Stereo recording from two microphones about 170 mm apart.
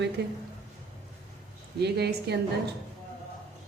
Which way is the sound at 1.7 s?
75° right (ahead or behind).